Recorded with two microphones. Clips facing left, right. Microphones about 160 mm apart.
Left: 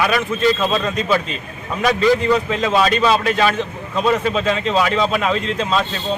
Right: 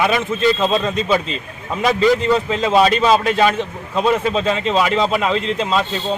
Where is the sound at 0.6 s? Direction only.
25° right (ahead or behind).